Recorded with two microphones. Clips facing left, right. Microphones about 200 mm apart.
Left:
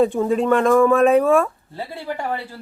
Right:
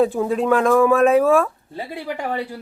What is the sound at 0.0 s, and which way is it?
Speech, centre (ahead or behind).